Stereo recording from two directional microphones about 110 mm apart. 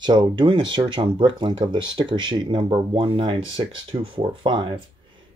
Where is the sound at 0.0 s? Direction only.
45° right (ahead or behind).